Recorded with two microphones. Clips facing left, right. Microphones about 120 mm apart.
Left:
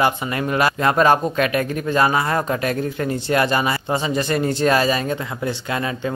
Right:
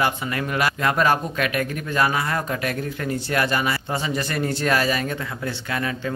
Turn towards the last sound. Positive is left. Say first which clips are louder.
# left 3 dB
turn(degrees=25)  # may be behind; listen again after turning